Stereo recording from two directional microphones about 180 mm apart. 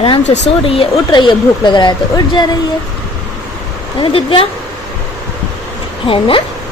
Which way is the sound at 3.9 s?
30° left (ahead or behind).